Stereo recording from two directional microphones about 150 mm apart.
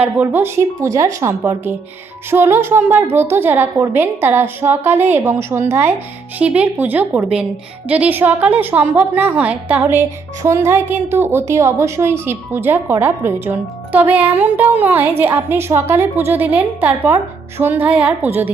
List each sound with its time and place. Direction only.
0.0 s a woman's voice: 15° right (ahead or behind)